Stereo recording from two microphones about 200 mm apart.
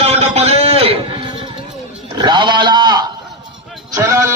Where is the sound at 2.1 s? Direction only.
20° right (ahead or behind).